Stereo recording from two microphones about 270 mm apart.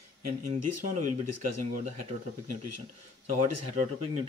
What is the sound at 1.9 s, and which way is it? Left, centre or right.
Speech, right.